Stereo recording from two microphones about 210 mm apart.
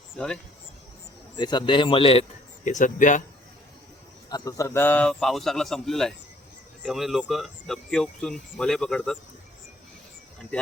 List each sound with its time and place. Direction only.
1.4 s speech: 20° left (ahead or behind)
2.6 s speech: 35° left (ahead or behind)
4.3 s speech: 15° left (ahead or behind)